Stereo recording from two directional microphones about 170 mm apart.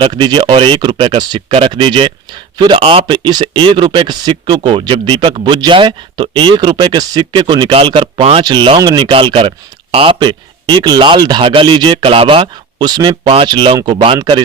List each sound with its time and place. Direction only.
0.0 s speech: 25° right (ahead or behind)